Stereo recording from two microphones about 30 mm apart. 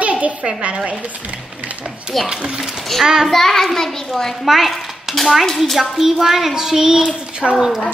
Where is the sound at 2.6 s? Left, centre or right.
Centre.